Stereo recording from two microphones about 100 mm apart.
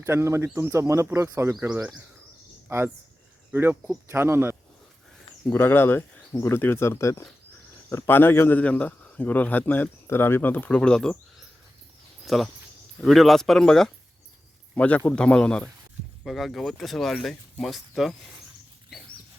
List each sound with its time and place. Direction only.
0.0 s speech: 30° right (ahead or behind)
1.6 s speech: 10° right (ahead or behind)
2.6 s speech: 25° right (ahead or behind)
5.5 s a man's voice: 20° left (ahead or behind)
12.2 s a man's voice: centre (ahead or behind)